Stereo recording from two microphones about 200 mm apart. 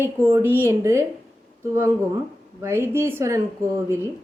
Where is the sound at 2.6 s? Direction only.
10° right (ahead or behind).